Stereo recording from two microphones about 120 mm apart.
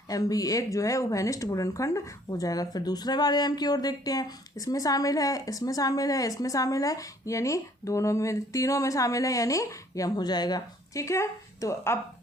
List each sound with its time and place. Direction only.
0.1 s speech: 30° left (ahead or behind)